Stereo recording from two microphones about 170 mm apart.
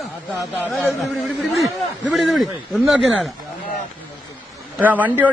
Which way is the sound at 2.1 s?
Centre (ahead or behind).